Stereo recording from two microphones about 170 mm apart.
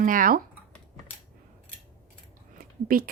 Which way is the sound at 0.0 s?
55° right (ahead or behind).